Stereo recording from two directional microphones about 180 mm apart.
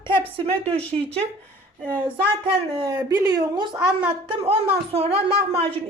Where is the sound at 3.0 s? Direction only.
20° right (ahead or behind).